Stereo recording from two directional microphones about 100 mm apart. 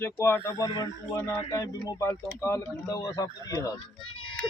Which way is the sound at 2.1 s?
25° left (ahead or behind).